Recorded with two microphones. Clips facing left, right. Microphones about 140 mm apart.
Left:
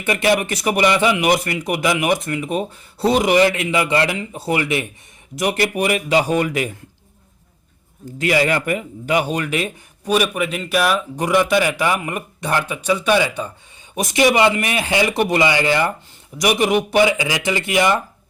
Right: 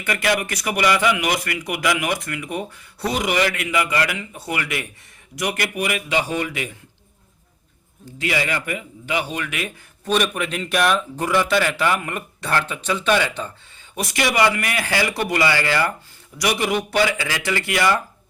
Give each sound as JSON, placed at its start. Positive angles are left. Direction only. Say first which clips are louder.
{"t": 0.0, "sound": "a man's voice", "louder": "left 4 dB", "side_deg": 25}
{"t": 8.0, "sound": "speech", "louder": "left 6 dB", "side_deg": 45}
{"t": 10.0, "sound": "a man's voice", "louder": "left 3 dB", "side_deg": 10}
{"t": 11.2, "sound": "a man's voice", "louder": "left 4 dB", "side_deg": 15}